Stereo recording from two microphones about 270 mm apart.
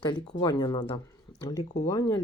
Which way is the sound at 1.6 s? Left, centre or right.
Left.